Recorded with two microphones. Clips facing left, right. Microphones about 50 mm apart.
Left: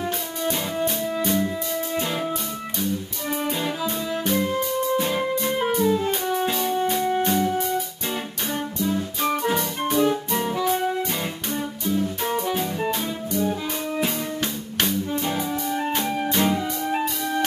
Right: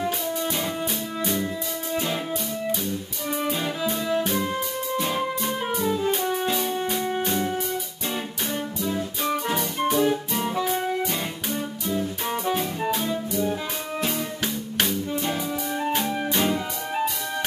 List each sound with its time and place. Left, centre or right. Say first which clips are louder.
0.5 s music: left 3 dB; centre
3.3 s music: even; centre
4.9 s music: left 3 dB; centre
9.2 s music: left 3 dB; centre
12.5 s music: left 1 dB; centre
14.8 s music: left 2 dB; centre